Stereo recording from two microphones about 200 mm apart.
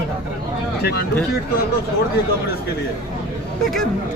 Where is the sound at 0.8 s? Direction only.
55° left (ahead or behind).